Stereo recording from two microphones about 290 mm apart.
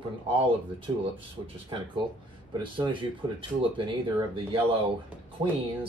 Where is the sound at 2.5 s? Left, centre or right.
Centre.